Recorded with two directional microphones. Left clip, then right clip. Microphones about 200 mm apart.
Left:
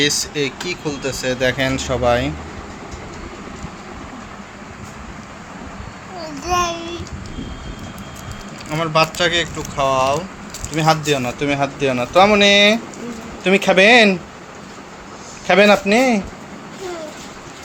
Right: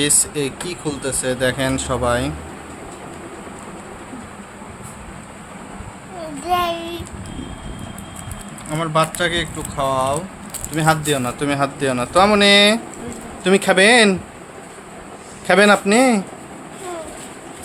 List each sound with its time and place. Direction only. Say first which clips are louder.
0.0 s speech: left 2 dB; 10° right (ahead or behind)
6.5 s child singing: even; 20° right (ahead or behind)
8.7 s speech: left 2 dB; 10° left (ahead or behind)
10.8 s speech: left 1 dB; centre (ahead or behind)
15.4 s speech: left 1 dB; 10° right (ahead or behind)